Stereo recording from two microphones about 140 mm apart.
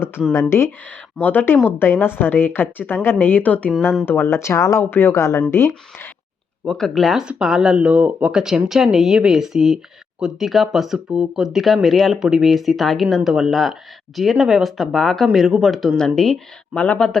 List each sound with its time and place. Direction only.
0.5 s a woman's voice: 15° left (ahead or behind)
6.7 s speech: 5° left (ahead or behind)